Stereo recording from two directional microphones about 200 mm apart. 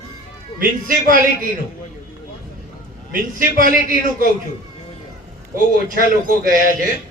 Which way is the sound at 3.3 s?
45° right (ahead or behind).